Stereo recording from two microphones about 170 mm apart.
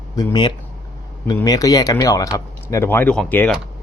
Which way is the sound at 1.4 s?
20° left (ahead or behind).